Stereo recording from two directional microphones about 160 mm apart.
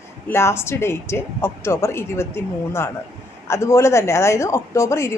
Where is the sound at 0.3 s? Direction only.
15° left (ahead or behind).